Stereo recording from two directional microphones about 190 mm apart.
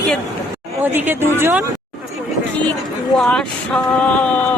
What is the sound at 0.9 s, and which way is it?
Speech, 10° right (ahead or behind).